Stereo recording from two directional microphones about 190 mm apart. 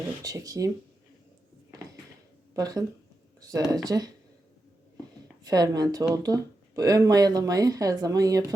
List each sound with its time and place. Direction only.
0.2 s speech: 20° right (ahead or behind)
2.6 s speech: 20° right (ahead or behind)
5.5 s speech: 20° right (ahead or behind)